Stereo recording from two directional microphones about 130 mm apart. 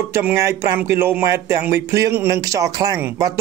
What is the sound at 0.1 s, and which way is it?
A man's voice, 15° right (ahead or behind).